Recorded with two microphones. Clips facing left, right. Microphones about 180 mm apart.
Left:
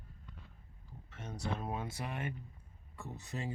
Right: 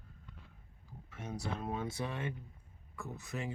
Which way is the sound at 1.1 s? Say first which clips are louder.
Right 1 dB; 10° right (ahead or behind).